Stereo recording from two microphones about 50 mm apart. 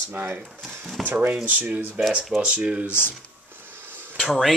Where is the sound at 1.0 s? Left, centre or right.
Right.